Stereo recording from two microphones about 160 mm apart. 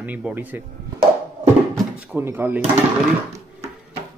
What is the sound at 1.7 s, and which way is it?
Drawer open or close, 10° right (ahead or behind).